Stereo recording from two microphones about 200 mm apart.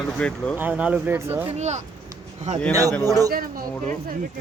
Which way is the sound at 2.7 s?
15° right (ahead or behind).